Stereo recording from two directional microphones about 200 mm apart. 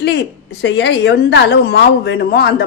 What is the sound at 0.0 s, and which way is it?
A woman's voice, 60° left (ahead or behind).